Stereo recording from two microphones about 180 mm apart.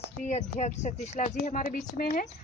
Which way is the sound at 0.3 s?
40° left (ahead or behind).